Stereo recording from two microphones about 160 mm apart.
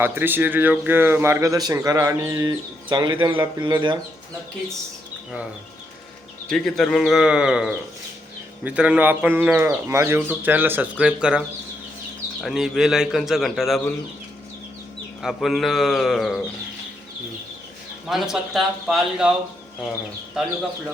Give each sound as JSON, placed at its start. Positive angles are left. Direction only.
{"t": 0.0, "sound": "speech", "side_deg": -15}
{"t": 6.5, "sound": "a man's voice", "side_deg": 5}
{"t": 15.2, "sound": "a man's voice", "side_deg": 0}
{"t": 18.1, "sound": "a man's voice", "side_deg": 0}